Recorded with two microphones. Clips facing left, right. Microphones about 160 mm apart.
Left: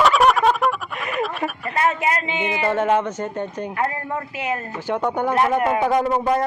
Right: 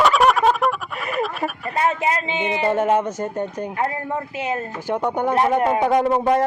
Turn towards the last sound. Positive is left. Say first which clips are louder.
# right 2 dB
turn(degrees=-30)  # may be behind; listen again after turning